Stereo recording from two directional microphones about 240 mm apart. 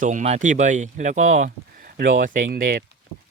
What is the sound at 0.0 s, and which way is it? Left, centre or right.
Speech, right.